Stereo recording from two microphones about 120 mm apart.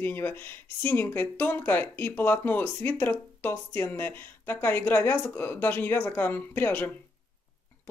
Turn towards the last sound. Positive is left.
turn(degrees=15)  # may be behind; listen again after turning